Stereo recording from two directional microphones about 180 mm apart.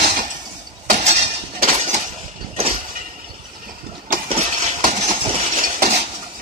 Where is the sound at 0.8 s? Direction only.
40° right (ahead or behind).